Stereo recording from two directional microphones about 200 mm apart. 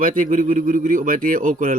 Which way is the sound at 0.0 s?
40° right (ahead or behind).